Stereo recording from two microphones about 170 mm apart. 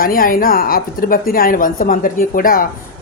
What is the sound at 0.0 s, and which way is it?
A woman's voice, 55° left (ahead or behind).